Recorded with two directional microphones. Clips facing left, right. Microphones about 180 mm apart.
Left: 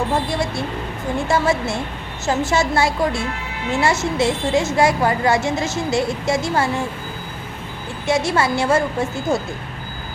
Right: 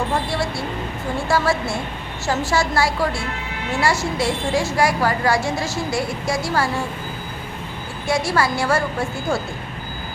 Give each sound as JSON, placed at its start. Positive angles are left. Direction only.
{"t": 0.3, "sound": "vehicle", "side_deg": 20}
{"t": 1.3, "sound": "a woman's voice", "side_deg": 20}
{"t": 8.0, "sound": "a woman's voice", "side_deg": 20}